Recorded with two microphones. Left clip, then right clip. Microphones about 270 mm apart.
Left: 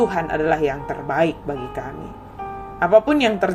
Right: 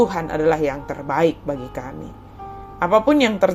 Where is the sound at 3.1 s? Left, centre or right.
Centre.